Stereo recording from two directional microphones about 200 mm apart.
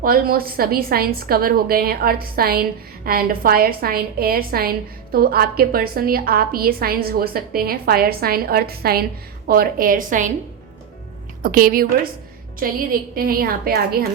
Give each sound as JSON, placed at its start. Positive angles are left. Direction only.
{"t": 0.0, "sound": "a woman's voice", "side_deg": -45}
{"t": 11.4, "sound": "a woman's voice", "side_deg": -45}